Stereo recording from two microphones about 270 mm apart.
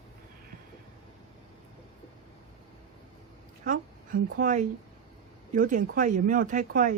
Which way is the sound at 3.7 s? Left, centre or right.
Right.